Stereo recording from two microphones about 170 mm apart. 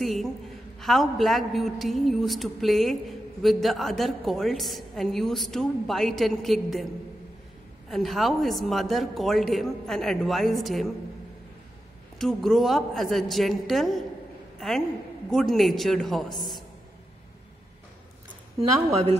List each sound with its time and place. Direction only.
0.0 s a woman's voice: centre (ahead or behind)
7.9 s a woman's voice: centre (ahead or behind)
12.2 s a woman's voice: centre (ahead or behind)
15.2 s a woman's voice: centre (ahead or behind)
16.3 s a woman's voice: 25° left (ahead or behind)